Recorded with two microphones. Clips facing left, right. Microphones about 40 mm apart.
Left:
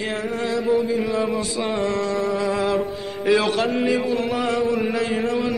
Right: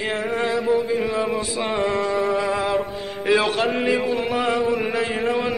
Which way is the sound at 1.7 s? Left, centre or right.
Centre.